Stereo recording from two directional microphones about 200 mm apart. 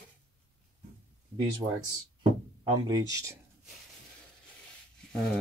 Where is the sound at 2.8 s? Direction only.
20° right (ahead or behind).